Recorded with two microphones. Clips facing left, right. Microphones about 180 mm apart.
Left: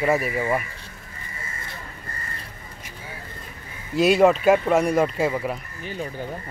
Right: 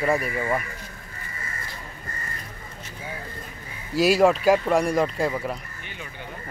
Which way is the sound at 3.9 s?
Centre (ahead or behind).